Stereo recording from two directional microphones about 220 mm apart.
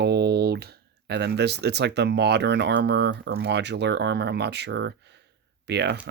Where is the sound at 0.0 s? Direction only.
45° right (ahead or behind).